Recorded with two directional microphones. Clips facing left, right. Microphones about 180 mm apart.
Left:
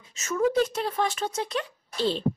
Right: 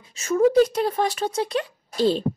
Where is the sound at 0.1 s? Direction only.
35° right (ahead or behind).